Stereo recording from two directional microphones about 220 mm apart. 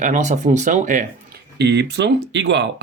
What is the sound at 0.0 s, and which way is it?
Speech, 35° right (ahead or behind).